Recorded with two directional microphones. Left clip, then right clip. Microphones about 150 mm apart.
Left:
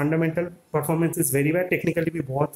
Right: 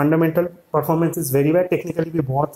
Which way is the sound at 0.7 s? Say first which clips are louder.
Right 5 dB; centre (ahead or behind).